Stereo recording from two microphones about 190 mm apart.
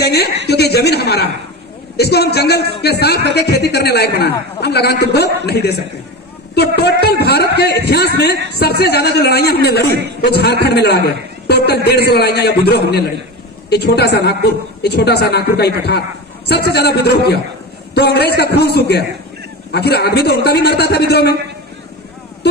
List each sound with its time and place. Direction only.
0.0 s a woman's voice: 60° left (ahead or behind)